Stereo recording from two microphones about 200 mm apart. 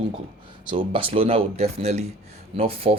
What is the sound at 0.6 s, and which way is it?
Speech, 25° right (ahead or behind).